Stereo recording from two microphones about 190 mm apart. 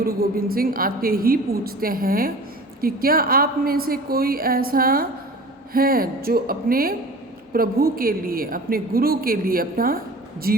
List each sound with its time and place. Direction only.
0.0 s speech: 50° right (ahead or behind)